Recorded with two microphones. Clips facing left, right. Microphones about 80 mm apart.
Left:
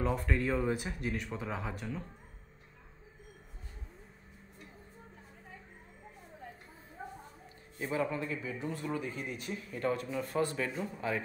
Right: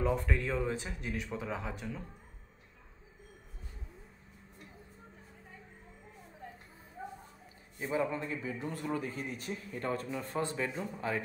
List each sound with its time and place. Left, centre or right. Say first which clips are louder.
0.0 s speech: even; centre
8.1 s a man's voice: left 1 dB; right
8.5 s speech: even; right
10.8 s speech: even; right